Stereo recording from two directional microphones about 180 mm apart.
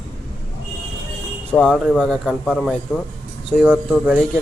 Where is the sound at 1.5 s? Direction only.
5° left (ahead or behind).